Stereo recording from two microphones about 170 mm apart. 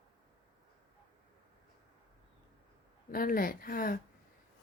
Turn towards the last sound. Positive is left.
turn(degrees=55)  # may be behind; listen again after turning